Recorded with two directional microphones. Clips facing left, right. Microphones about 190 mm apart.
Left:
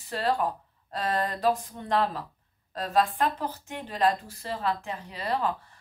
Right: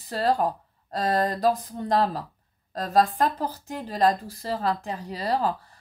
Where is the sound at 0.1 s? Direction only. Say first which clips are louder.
Right 4 dB; 40° right (ahead or behind).